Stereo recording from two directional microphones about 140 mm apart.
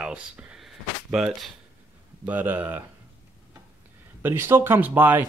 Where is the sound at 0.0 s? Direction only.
10° right (ahead or behind).